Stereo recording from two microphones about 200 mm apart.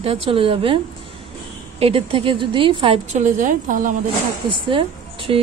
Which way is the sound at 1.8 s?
30° right (ahead or behind).